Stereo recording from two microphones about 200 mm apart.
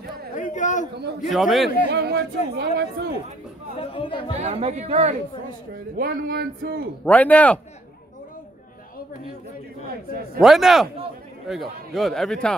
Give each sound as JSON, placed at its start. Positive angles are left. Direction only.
{"t": 0.4, "sound": "a sound", "side_deg": 40}
{"t": 1.3, "sound": "a man's voice", "side_deg": 0}
{"t": 1.9, "sound": "speech", "side_deg": -55}
{"t": 3.7, "sound": "speech", "side_deg": 25}
{"t": 4.4, "sound": "speech", "side_deg": -30}
{"t": 5.9, "sound": "speech", "side_deg": -50}
{"t": 7.1, "sound": "speech", "side_deg": 5}
{"t": 10.4, "sound": "a man's voice", "side_deg": 0}